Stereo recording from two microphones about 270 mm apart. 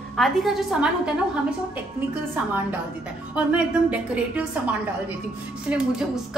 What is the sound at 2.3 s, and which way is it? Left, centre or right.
A woman's voice, centre.